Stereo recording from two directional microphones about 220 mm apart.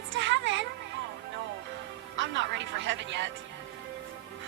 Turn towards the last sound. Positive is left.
turn(degrees=-55)  # may be behind; listen again after turning